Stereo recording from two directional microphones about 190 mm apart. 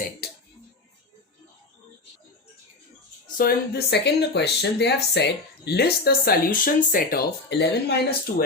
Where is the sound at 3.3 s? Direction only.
55° left (ahead or behind).